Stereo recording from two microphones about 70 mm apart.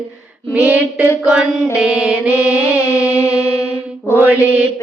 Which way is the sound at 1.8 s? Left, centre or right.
Centre.